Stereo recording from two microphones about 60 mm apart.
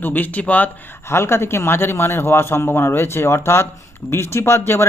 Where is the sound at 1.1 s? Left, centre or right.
Left.